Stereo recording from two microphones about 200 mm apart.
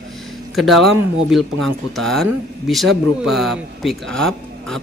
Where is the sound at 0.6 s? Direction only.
Centre (ahead or behind).